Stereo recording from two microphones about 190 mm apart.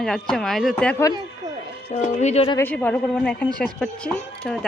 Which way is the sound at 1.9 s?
40° left (ahead or behind).